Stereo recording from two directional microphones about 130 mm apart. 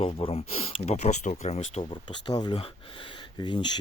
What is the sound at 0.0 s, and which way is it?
Speech, 50° left (ahead or behind).